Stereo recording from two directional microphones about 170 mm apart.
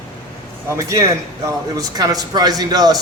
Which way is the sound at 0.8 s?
20° right (ahead or behind).